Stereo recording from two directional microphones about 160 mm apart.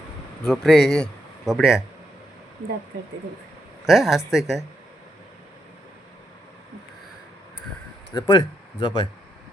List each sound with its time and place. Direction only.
0.4 s speech: centre (ahead or behind)
3.8 s speech: centre (ahead or behind)
8.1 s speech: 25° left (ahead or behind)